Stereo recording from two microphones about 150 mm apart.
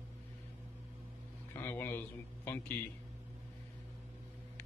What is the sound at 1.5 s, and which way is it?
A man's voice, 15° left (ahead or behind).